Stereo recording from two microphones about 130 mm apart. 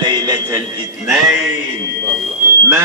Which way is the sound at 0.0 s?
35° right (ahead or behind).